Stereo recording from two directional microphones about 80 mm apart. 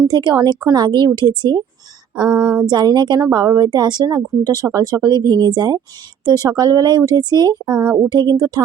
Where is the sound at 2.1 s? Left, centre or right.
Right.